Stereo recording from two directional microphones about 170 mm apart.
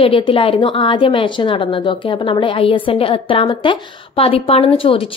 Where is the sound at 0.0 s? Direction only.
35° left (ahead or behind).